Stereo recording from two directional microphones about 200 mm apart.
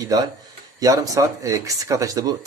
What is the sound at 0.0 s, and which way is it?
Speech, 20° right (ahead or behind).